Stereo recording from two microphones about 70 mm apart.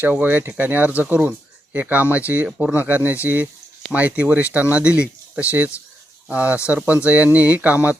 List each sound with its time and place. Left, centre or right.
0.0 s speech: right